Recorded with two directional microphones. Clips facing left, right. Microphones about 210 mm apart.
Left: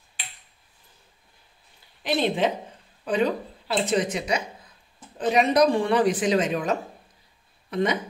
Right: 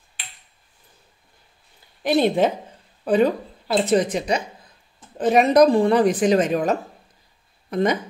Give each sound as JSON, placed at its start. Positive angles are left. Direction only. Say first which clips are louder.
{"t": 2.0, "sound": "a woman's voice", "louder": "right 5 dB", "side_deg": -45}
{"t": 5.3, "sound": "a woman's voice", "louder": "right 5 dB", "side_deg": -50}